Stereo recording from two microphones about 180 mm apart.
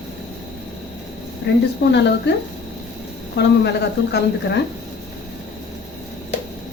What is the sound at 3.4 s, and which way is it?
Speech, 70° left (ahead or behind).